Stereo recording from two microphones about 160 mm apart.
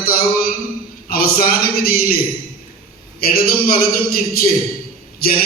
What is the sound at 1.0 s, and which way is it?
A man's voice, 70° left (ahead or behind).